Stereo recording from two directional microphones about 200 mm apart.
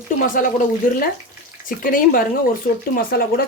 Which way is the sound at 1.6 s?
45° left (ahead or behind).